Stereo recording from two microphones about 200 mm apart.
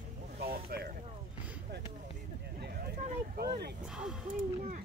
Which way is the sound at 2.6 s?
50° right (ahead or behind).